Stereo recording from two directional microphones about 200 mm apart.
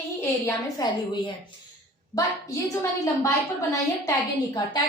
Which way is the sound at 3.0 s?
15° left (ahead or behind).